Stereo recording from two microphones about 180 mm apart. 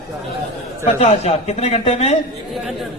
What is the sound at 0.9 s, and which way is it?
A man's voice, 35° left (ahead or behind).